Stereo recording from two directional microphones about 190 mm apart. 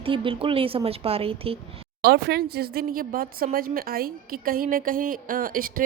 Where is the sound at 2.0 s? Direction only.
55° right (ahead or behind).